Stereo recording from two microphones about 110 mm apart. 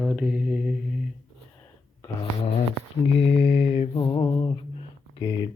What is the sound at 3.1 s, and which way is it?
Mantra, 65° left (ahead or behind).